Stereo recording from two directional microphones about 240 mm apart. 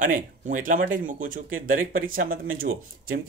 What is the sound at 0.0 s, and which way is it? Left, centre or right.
Speech, right.